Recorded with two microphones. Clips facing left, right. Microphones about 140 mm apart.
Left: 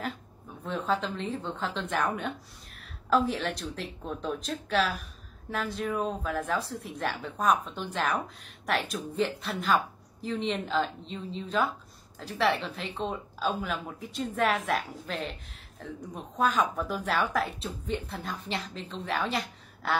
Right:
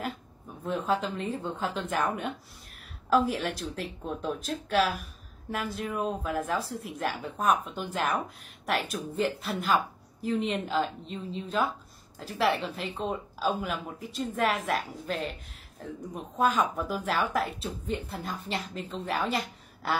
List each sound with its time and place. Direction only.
0.7 s a woman's voice: 10° right (ahead or behind)